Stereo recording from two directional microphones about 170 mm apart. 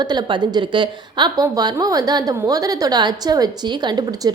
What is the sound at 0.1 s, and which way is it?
A woman's voice, 25° right (ahead or behind).